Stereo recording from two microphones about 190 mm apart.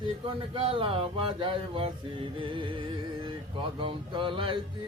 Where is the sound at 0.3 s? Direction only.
25° right (ahead or behind).